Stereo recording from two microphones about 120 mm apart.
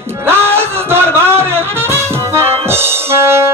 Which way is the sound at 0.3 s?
20° right (ahead or behind).